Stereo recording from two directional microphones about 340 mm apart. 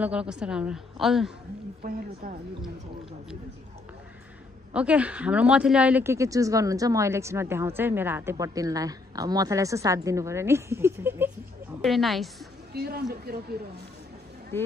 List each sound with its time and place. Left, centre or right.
0.0 s a woman's voice: centre
1.8 s speech: right
4.7 s a woman's voice: centre
12.7 s speech: right